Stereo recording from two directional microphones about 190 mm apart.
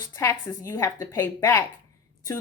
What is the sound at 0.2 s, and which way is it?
Speech, 15° left (ahead or behind).